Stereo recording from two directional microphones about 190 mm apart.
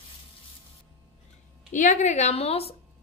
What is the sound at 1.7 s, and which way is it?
A woman's voice, 40° left (ahead or behind).